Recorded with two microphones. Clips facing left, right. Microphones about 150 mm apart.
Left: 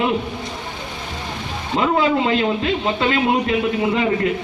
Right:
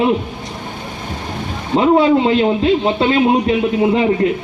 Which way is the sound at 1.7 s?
30° right (ahead or behind).